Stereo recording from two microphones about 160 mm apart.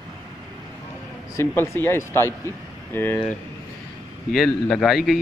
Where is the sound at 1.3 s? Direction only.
15° left (ahead or behind).